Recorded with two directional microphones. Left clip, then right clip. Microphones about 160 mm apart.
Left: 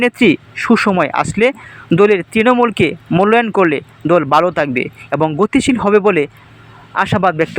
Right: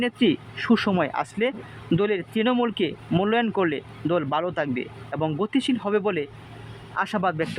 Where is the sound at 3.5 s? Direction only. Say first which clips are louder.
Left 11 dB; 25° left (ahead or behind).